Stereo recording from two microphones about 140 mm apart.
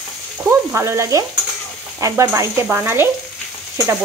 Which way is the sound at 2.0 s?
25° right (ahead or behind).